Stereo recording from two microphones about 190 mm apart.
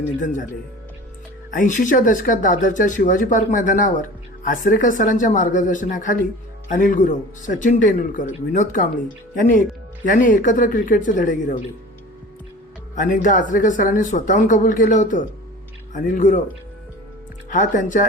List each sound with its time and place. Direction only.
0.2 s speech: 40° left (ahead or behind)
1.5 s speech: 45° left (ahead or behind)
13.0 s speech: 45° left (ahead or behind)
17.5 s speech: 40° left (ahead or behind)